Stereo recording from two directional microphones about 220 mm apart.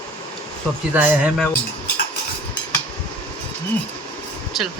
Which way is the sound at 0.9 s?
5° right (ahead or behind).